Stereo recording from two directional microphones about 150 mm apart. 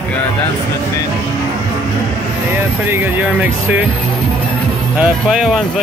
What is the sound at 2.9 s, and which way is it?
Speech, 15° right (ahead or behind).